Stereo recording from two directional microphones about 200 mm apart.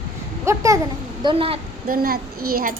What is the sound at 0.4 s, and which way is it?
Babbling, 15° right (ahead or behind).